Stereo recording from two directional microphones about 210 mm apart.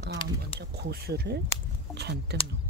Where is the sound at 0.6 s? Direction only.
50° right (ahead or behind).